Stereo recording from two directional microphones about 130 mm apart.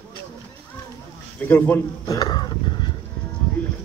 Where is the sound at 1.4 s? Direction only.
15° left (ahead or behind).